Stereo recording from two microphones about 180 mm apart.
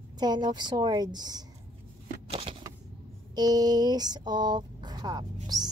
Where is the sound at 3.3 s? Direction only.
20° right (ahead or behind).